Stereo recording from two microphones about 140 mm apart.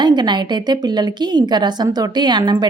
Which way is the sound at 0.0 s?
30° right (ahead or behind).